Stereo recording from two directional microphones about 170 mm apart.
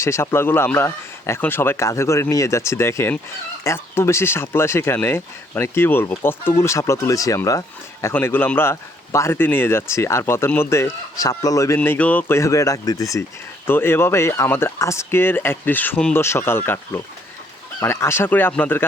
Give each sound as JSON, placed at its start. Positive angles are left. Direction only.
{"t": 0.0, "sound": "speech", "side_deg": 15}